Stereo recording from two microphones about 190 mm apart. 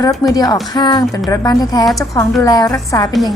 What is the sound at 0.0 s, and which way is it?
Speech, 20° left (ahead or behind).